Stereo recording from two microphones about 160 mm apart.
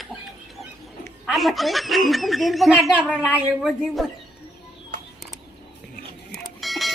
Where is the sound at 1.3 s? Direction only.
Centre (ahead or behind).